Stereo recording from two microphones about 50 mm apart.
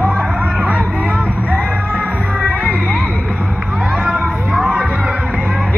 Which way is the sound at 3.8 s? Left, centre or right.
Centre.